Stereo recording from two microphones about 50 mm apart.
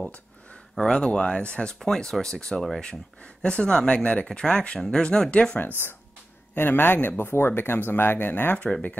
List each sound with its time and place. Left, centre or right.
0.7 s speech: centre
6.5 s speech: left